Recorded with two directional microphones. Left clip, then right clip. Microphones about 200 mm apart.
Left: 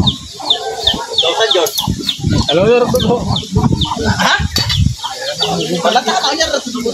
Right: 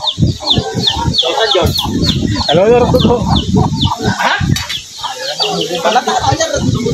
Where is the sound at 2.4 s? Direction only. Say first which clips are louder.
Right 2 dB; 10° left (ahead or behind).